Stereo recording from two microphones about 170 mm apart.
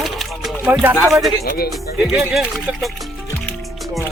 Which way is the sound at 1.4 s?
60° left (ahead or behind).